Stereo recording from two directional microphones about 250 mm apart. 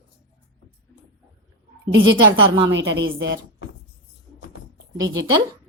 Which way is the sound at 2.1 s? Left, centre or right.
Centre.